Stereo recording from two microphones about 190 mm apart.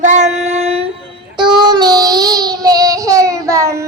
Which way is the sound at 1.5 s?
20° right (ahead or behind).